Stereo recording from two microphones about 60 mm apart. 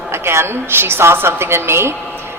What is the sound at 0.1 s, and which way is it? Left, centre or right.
A man's voice, right.